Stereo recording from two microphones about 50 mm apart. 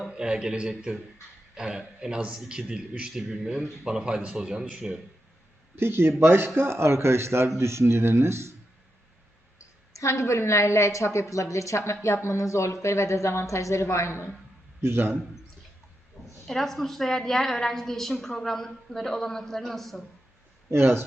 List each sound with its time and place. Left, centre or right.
0.1 s a man's voice: centre
5.7 s speech: right
9.9 s a woman's voice: left
11.9 s a woman's voice: left
13.9 s a woman's voice: left
14.8 s a man's voice: right
16.2 s a sound: centre
16.5 s a woman's voice: centre
20.7 s speech: right